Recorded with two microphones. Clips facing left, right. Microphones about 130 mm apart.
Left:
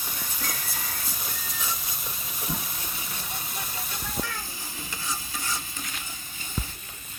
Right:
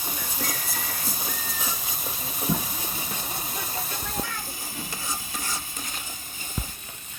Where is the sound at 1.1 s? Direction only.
35° right (ahead or behind).